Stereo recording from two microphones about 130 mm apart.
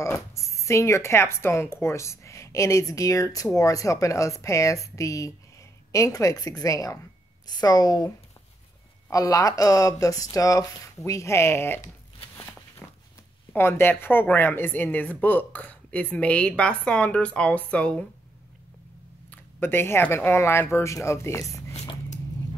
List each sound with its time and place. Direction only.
0.0 s speech: 20° left (ahead or behind)
9.1 s speech: 25° left (ahead or behind)
12.8 s a sound: 10° left (ahead or behind)
13.6 s speech: 20° left (ahead or behind)
19.3 s speech: 15° left (ahead or behind)